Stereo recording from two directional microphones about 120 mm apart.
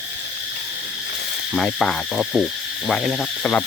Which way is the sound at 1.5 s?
5° left (ahead or behind).